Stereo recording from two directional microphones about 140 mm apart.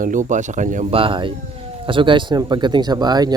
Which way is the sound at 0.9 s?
40° right (ahead or behind).